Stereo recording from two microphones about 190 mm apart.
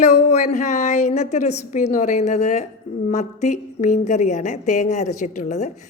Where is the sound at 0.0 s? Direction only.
40° left (ahead or behind).